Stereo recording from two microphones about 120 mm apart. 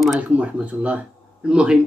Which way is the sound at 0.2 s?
10° right (ahead or behind).